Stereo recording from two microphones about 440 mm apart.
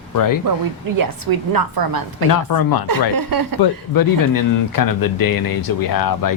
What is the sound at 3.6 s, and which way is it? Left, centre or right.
Speech, left.